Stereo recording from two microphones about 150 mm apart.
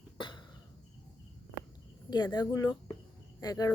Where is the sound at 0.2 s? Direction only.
30° left (ahead or behind).